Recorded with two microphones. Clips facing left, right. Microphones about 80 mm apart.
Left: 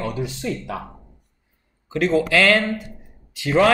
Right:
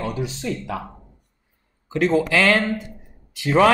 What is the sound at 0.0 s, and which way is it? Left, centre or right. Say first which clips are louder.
Speech: even; right.